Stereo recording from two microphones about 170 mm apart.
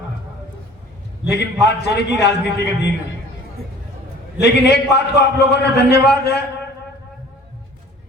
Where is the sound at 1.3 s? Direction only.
80° left.